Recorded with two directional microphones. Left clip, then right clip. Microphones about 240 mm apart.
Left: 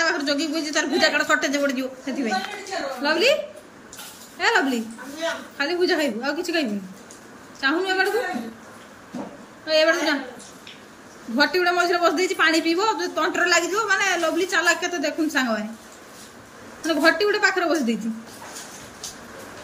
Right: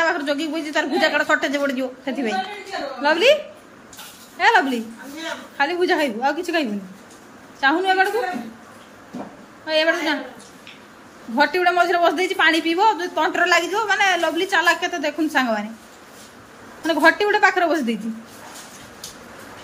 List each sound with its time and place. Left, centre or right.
0.0 s a woman's voice: centre
4.4 s a woman's voice: centre
9.7 s a woman's voice: centre
11.3 s a woman's voice: centre
16.8 s a woman's voice: centre